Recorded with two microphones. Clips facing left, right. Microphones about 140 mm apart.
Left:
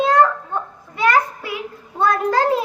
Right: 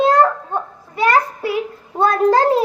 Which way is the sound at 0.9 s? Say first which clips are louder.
Right 2 dB; 30° right (ahead or behind).